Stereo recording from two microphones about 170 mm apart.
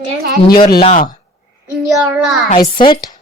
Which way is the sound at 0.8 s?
45° left (ahead or behind).